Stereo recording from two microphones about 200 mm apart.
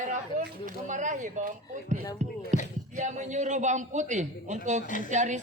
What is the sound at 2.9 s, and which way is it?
A man's voice, 35° right (ahead or behind).